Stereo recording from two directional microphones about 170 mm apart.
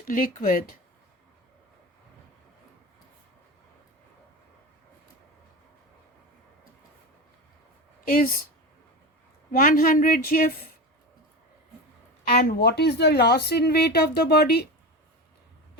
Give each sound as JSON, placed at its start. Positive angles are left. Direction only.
{"t": 0.1, "sound": "speech", "side_deg": 55}
{"t": 8.0, "sound": "speech", "side_deg": 55}
{"t": 9.5, "sound": "speech", "side_deg": 55}
{"t": 12.5, "sound": "speech", "side_deg": 75}